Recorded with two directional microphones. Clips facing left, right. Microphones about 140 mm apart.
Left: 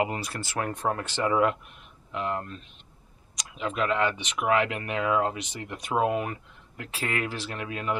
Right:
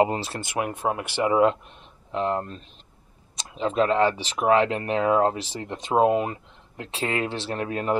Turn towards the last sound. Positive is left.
turn(degrees=-40)  # may be behind; listen again after turning